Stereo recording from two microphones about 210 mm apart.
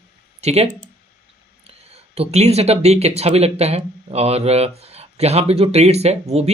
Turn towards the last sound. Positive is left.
turn(degrees=-30)  # may be behind; listen again after turning